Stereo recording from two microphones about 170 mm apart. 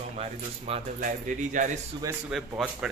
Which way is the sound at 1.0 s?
50° right (ahead or behind).